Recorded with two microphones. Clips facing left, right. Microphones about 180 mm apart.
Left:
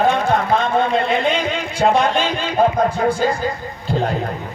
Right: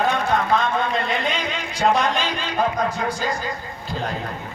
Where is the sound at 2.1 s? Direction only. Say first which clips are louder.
Left 6 dB; 50° left (ahead or behind).